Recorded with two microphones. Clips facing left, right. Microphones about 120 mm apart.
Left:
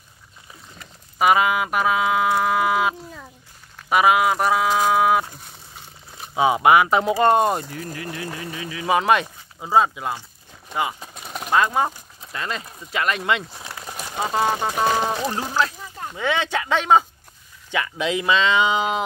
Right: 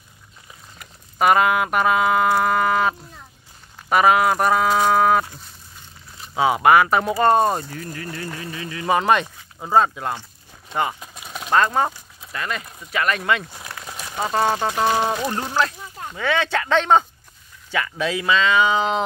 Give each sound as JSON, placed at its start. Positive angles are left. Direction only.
{"t": 1.2, "sound": "music", "side_deg": 0}
{"t": 6.3, "sound": "speech", "side_deg": 20}
{"t": 8.5, "sound": "music", "side_deg": 5}
{"t": 10.7, "sound": "speech", "side_deg": 5}
{"t": 11.1, "sound": "a sound", "side_deg": 5}
{"t": 12.3, "sound": "speech", "side_deg": 25}
{"t": 13.4, "sound": "music", "side_deg": 0}
{"t": 13.7, "sound": "speech", "side_deg": 10}
{"t": 15.3, "sound": "music", "side_deg": 5}
{"t": 16.2, "sound": "speech", "side_deg": 20}